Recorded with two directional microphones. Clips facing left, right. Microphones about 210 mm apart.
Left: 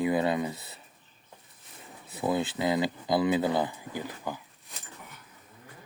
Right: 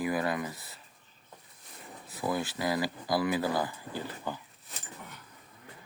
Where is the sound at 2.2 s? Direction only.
25° left (ahead or behind).